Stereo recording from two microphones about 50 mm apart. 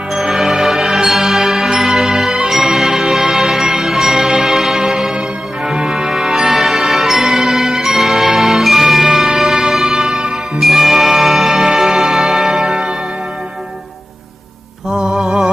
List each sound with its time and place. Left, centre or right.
0.3 s music: centre
10.6 s music: centre
14.8 s mantra: centre